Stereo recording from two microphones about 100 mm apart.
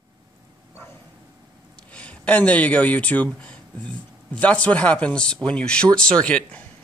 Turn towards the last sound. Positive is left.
turn(degrees=10)  # may be behind; listen again after turning